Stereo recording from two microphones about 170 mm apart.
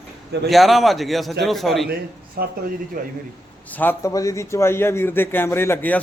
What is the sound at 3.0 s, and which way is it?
Speech, 50° right (ahead or behind).